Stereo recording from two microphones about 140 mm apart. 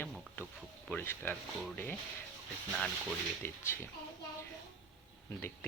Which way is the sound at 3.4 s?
15° left (ahead or behind).